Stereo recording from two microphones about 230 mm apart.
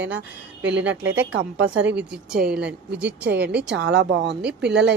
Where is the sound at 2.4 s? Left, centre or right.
Right.